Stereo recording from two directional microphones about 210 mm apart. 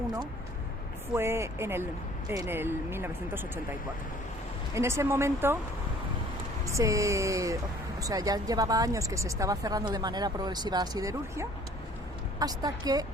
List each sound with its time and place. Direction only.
1.1 s speech: 10° right (ahead or behind)
4.7 s speech: 15° right (ahead or behind)
6.7 s speech: 15° right (ahead or behind)